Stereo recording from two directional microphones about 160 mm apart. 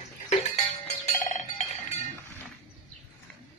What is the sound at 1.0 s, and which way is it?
Cowbell, 45° left (ahead or behind).